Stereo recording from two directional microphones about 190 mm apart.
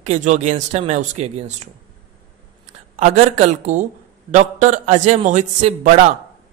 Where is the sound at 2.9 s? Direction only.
40° right (ahead or behind).